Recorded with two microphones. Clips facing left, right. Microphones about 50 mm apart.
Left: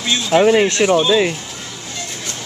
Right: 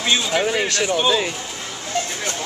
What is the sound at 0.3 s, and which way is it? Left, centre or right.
Speech, centre.